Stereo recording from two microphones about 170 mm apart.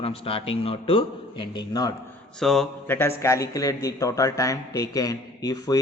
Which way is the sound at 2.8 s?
10° left (ahead or behind).